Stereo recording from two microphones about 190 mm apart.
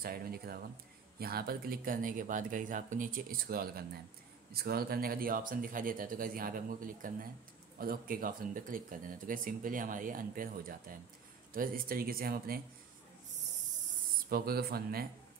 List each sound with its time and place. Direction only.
0.0 s speech: 55° right (ahead or behind)
14.3 s speech: 55° right (ahead or behind)